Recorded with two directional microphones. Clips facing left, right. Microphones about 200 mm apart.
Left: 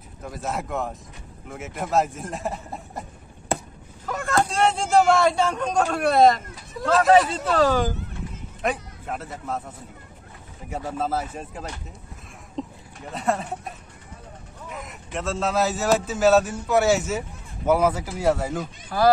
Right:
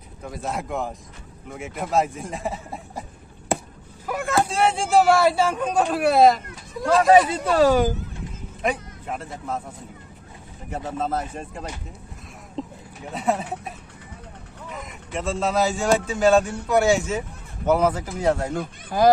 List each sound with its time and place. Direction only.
0.2 s speech: centre (ahead or behind)
10.7 s speech: 10° left (ahead or behind)
18.9 s speech: 20° right (ahead or behind)